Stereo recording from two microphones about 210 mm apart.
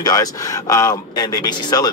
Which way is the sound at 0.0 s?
15° left (ahead or behind).